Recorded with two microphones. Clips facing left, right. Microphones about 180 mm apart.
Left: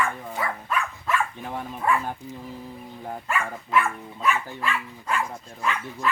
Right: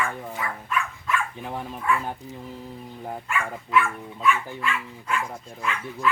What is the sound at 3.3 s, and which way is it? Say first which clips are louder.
Dog: even; 40° left (ahead or behind).